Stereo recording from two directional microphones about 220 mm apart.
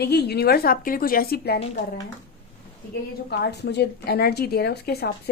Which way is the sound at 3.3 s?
50° left (ahead or behind).